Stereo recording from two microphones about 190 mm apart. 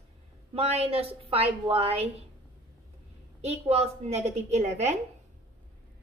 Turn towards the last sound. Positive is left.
turn(degrees=-35)  # may be behind; listen again after turning